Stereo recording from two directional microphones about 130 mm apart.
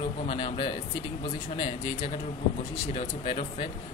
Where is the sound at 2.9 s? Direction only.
55° left (ahead or behind).